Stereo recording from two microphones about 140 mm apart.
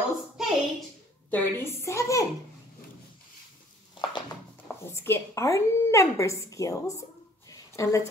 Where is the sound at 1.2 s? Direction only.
10° left (ahead or behind).